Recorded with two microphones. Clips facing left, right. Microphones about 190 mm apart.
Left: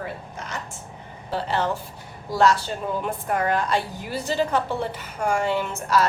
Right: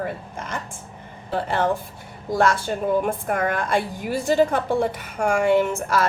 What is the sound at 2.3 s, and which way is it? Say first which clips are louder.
A woman's voice: even; 50° right (ahead or behind).